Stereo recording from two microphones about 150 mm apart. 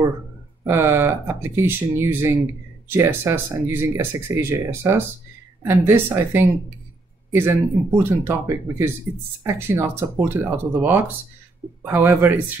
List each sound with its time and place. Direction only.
0.7 s speech: 15° right (ahead or behind)